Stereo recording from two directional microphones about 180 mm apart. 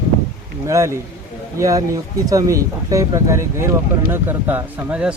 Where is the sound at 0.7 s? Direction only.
15° right (ahead or behind).